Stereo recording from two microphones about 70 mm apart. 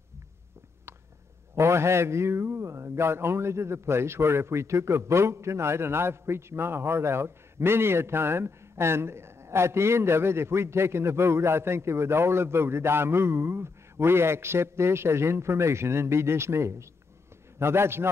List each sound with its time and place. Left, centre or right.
1.5 s a man's voice: right